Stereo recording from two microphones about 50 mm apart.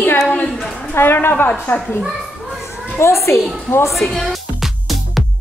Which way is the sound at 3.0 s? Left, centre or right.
Left.